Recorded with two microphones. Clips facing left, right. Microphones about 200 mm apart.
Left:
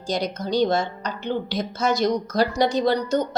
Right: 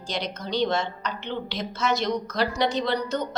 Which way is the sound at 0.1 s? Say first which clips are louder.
Left 5 dB; 40° left (ahead or behind).